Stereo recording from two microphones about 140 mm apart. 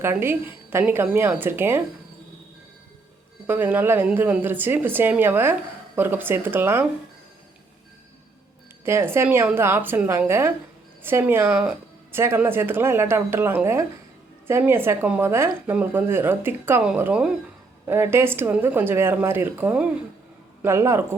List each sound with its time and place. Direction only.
0.0 s speech: 15° right (ahead or behind)
3.4 s speech: 15° right (ahead or behind)
8.8 s speech: 15° right (ahead or behind)